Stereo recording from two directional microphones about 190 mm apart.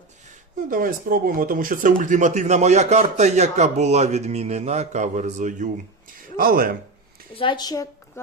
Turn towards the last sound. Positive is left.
turn(degrees=20)  # may be behind; listen again after turning